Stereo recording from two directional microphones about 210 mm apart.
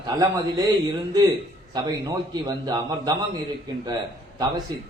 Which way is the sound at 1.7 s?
15° right (ahead or behind).